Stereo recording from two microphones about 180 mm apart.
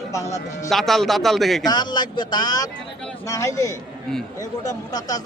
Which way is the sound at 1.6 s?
25° left (ahead or behind).